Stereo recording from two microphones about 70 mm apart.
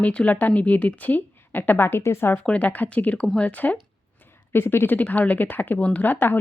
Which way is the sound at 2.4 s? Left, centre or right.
Centre.